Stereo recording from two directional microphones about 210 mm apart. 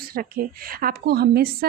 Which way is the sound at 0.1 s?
45° right (ahead or behind).